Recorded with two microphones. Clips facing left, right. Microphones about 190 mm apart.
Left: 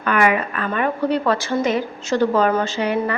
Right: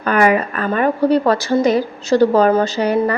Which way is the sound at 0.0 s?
40° right (ahead or behind).